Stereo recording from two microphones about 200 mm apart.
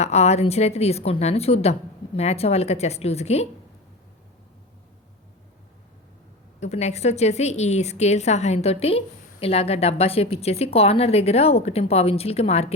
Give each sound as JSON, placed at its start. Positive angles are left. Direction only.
{"t": 0.0, "sound": "a woman's voice", "side_deg": 35}
{"t": 6.6, "sound": "a woman's voice", "side_deg": 35}